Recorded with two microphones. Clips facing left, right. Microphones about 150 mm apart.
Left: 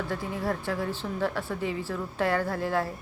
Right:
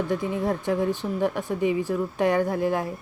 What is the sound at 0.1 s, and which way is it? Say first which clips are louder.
A woman's voice: right 5 dB; 20° right (ahead or behind).